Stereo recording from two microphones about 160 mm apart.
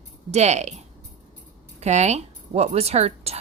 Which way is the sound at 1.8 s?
45° right (ahead or behind).